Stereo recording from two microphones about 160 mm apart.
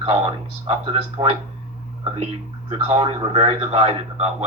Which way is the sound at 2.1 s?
40° right (ahead or behind).